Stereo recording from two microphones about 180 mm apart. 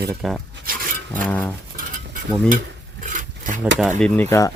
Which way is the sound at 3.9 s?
5° left (ahead or behind).